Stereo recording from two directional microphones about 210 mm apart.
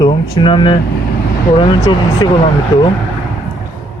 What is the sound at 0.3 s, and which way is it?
A man's voice, 20° left (ahead or behind).